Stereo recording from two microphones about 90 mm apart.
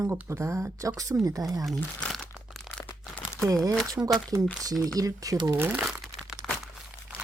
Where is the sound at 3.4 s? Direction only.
40° right (ahead or behind).